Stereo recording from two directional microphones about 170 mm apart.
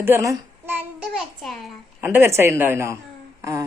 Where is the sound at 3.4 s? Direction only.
20° right (ahead or behind).